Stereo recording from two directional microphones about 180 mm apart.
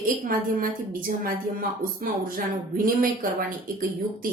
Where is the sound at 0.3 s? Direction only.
55° right (ahead or behind).